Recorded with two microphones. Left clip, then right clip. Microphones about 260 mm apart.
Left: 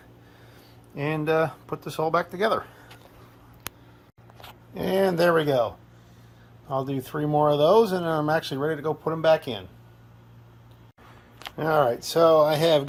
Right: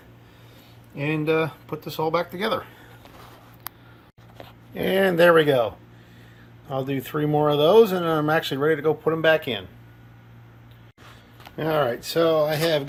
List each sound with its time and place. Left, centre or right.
0.9 s speech: left
4.7 s speech: centre
11.5 s speech: centre